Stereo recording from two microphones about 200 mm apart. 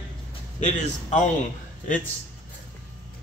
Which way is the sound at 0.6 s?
35° left (ahead or behind).